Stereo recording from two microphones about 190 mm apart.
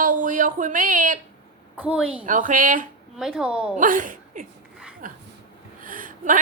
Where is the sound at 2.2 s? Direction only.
45° right (ahead or behind).